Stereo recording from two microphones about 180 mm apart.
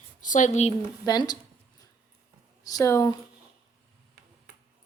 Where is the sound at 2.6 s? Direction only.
20° left (ahead or behind).